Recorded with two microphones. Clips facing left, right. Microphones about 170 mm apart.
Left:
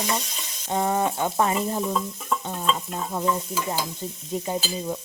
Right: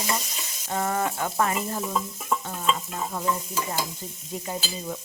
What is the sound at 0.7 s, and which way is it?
Speech, 20° left (ahead or behind).